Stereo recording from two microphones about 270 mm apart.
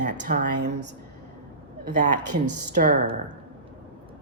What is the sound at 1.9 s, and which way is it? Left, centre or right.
Speech, right.